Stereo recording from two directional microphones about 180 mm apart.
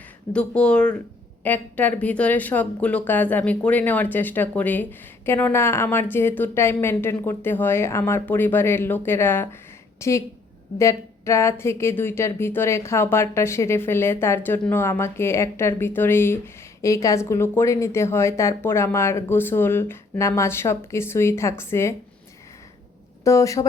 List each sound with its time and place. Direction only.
0.3 s speech: 5° left (ahead or behind)
23.2 s speech: 15° left (ahead or behind)